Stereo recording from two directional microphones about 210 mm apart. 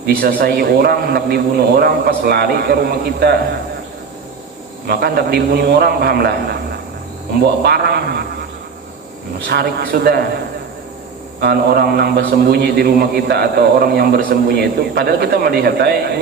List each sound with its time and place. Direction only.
0.0 s a man's voice: 45° right (ahead or behind)
4.9 s a man's voice: 50° right (ahead or behind)
7.6 s a man's voice: 50° right (ahead or behind)
9.5 s a man's voice: 50° right (ahead or behind)
11.3 s a man's voice: 50° right (ahead or behind)